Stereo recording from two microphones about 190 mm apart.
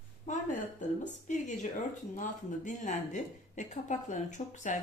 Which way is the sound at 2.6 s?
40° left (ahead or behind).